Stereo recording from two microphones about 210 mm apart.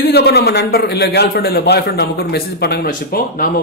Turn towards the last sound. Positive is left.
turn(degrees=45)  # may be behind; listen again after turning